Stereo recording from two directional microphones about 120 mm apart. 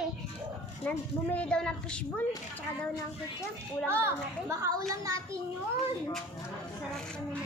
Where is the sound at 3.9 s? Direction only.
25° right (ahead or behind).